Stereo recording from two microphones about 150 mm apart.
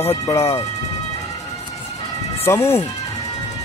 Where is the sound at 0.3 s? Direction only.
20° left (ahead or behind).